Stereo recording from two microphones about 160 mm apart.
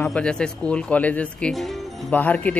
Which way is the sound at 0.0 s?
5° left (ahead or behind).